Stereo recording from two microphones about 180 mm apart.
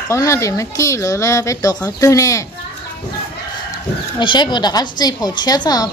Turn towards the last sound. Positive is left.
turn(degrees=20)  # may be behind; listen again after turning